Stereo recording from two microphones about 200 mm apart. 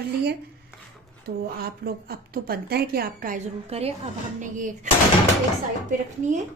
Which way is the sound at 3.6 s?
30° right (ahead or behind).